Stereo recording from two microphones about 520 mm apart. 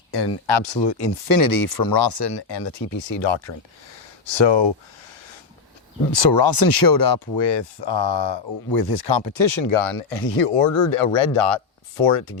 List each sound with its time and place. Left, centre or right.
0.4 s speech: left
6.1 s speech: left
9.7 s speech: left